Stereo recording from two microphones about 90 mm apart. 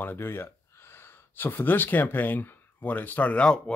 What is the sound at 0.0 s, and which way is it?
Speech, 25° left (ahead or behind).